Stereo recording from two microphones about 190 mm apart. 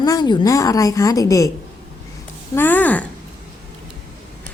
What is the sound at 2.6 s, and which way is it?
Speech, 10° left (ahead or behind).